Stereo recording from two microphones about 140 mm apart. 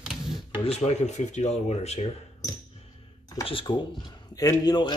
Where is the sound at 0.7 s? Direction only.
55° left (ahead or behind).